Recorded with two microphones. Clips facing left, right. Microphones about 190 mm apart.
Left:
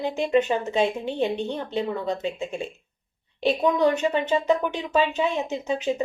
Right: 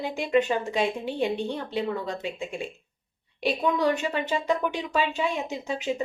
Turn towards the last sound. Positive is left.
turn(degrees=20)  # may be behind; listen again after turning